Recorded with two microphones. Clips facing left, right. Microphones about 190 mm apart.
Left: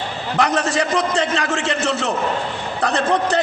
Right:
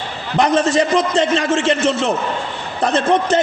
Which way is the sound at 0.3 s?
20° right (ahead or behind).